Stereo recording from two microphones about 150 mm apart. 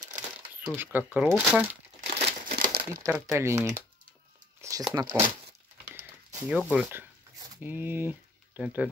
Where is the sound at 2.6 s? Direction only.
75° right (ahead or behind).